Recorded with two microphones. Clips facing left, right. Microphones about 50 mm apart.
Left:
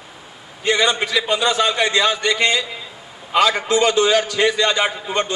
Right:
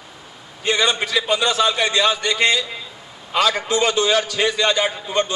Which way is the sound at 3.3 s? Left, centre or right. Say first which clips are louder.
Left 3 dB; centre.